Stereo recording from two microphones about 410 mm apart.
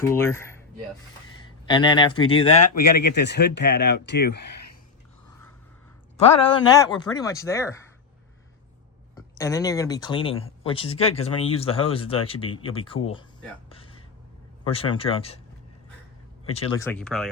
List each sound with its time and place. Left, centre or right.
0.0 s speech: centre
1.6 s speech: centre
3.0 s speech: left
6.1 s speech: centre
9.1 s speech: centre
16.5 s speech: centre